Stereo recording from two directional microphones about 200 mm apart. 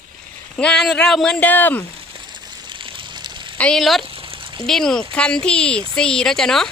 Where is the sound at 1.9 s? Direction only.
25° right (ahead or behind).